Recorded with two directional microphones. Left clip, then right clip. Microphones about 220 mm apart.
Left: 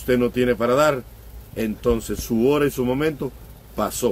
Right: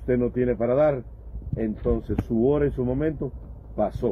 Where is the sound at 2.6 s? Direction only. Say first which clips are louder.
Left 4 dB; 15° left (ahead or behind).